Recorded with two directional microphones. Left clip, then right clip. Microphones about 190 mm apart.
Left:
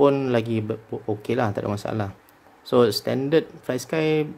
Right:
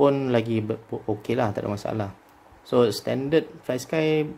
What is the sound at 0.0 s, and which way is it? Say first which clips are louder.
Speech: left 1 dB; 5° left (ahead or behind).